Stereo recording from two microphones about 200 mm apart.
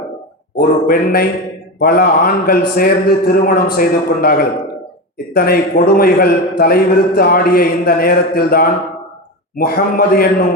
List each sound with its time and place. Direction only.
0.5 s a man's voice: 50° left (ahead or behind)